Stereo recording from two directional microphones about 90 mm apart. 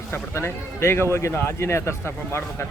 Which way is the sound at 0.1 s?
30° left (ahead or behind).